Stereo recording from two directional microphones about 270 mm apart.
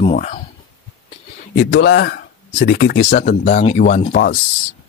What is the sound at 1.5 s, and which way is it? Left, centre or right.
Speech, left.